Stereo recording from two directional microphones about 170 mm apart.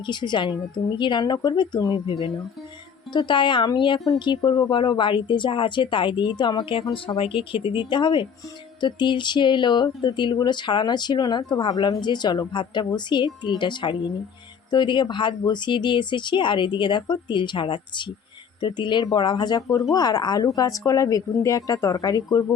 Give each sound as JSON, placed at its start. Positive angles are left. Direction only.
{"t": 0.0, "sound": "speech", "side_deg": 25}
{"t": 2.0, "sound": "speech", "side_deg": 35}